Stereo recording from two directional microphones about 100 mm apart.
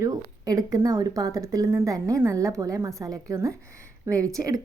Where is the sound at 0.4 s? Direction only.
35° right (ahead or behind).